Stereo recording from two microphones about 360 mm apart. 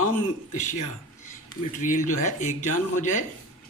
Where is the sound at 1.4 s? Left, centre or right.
Left.